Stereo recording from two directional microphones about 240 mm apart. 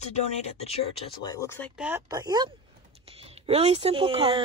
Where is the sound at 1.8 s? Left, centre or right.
Centre.